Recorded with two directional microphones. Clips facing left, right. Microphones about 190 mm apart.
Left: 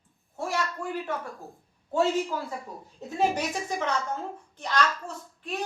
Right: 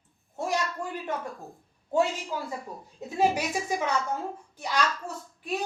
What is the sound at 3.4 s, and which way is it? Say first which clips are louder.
Speech: right 1 dB; 10° right (ahead or behind).